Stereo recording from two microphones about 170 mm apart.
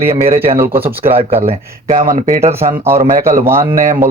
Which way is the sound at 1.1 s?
35° right (ahead or behind).